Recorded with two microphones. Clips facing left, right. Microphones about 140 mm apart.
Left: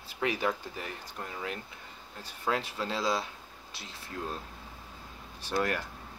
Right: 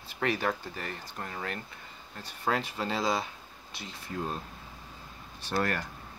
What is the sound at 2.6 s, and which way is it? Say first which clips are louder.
Speech: right 2 dB; 50° right (ahead or behind).